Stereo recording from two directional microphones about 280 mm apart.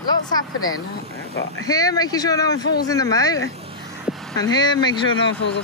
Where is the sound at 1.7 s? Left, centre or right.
Centre.